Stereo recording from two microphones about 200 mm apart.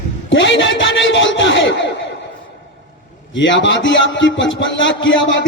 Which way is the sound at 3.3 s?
65° left (ahead or behind).